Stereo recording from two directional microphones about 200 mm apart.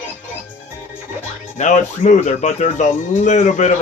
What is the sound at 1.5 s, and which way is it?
Speech, 35° left (ahead or behind).